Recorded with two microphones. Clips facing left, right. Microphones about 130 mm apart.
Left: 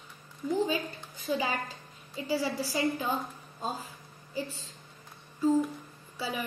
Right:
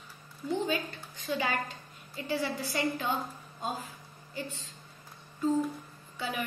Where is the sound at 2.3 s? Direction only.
35° left (ahead or behind).